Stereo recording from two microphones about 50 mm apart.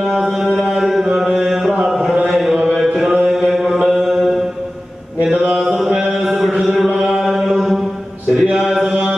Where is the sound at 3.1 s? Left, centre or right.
Centre.